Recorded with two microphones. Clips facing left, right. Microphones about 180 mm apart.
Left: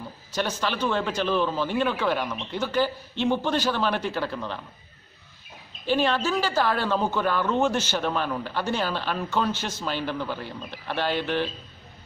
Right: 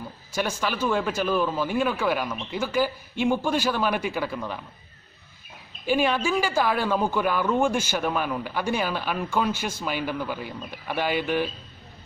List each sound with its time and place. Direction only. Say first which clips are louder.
0.3 s speech: even; 10° right (ahead or behind)
5.9 s speech: right 1 dB; 10° right (ahead or behind)